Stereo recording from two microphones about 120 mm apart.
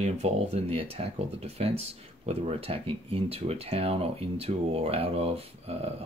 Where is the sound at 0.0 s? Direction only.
60° right (ahead or behind).